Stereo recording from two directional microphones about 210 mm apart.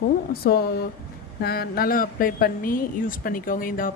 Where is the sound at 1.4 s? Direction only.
45° left (ahead or behind).